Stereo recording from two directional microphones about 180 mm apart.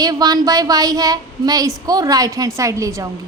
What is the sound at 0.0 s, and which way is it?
A woman's voice, 20° right (ahead or behind).